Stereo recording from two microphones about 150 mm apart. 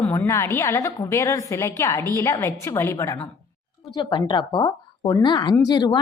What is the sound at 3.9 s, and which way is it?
A woman's voice, 30° left (ahead or behind).